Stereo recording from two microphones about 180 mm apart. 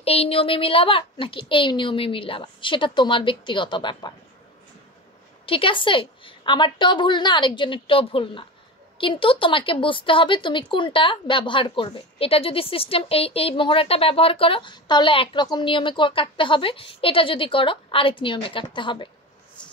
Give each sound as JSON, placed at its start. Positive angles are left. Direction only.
{"t": 0.0, "sound": "a woman's voice", "side_deg": 35}
{"t": 5.5, "sound": "speech", "side_deg": 30}